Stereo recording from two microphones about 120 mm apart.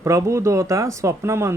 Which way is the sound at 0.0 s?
25° right (ahead or behind).